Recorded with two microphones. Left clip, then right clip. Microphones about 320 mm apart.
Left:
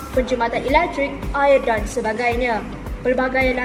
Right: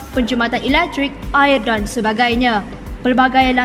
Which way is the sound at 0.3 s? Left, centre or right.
Right.